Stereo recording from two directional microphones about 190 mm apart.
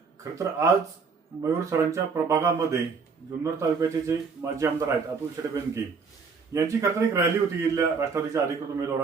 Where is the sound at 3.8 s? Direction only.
15° right (ahead or behind).